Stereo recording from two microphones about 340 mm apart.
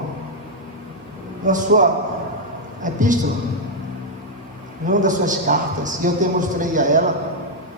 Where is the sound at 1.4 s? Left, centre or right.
Right.